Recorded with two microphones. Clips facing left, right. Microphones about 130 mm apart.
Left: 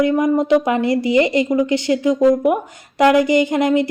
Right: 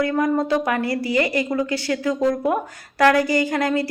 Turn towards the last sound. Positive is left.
turn(degrees=20)  # may be behind; listen again after turning